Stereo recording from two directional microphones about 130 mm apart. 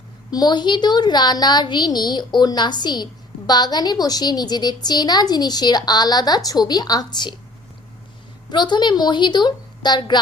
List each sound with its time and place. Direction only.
0.3 s a woman's voice: 30° left (ahead or behind)
8.4 s a woman's voice: 35° left (ahead or behind)